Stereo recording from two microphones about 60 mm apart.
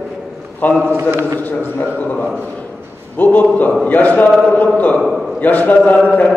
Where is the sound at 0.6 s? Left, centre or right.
Left.